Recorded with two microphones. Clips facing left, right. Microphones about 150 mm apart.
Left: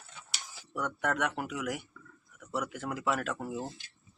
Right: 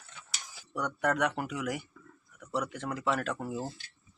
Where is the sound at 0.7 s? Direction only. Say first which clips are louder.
Right 2 dB; centre (ahead or behind).